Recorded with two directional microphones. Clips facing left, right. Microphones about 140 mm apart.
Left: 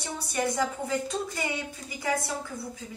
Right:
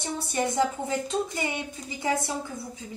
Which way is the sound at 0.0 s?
25° right (ahead or behind).